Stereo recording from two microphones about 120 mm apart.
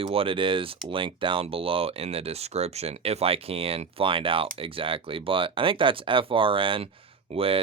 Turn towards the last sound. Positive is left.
turn(degrees=-50)  # may be behind; listen again after turning